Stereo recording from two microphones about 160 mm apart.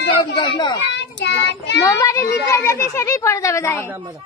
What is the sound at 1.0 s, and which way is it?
Child singing, 90° left.